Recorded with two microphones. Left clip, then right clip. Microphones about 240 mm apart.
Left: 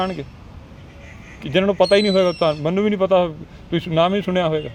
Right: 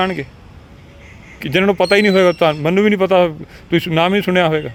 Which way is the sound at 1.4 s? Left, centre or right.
Right.